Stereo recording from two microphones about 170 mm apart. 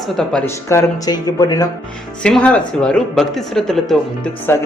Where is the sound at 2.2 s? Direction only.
5° left (ahead or behind).